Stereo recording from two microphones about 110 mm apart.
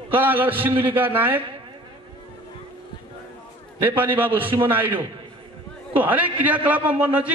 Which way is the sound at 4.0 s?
15° right (ahead or behind).